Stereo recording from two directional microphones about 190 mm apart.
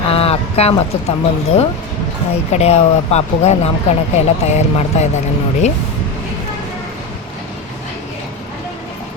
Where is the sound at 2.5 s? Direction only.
35° left (ahead or behind).